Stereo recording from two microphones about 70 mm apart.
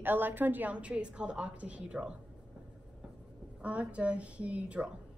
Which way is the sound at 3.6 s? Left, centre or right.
Centre.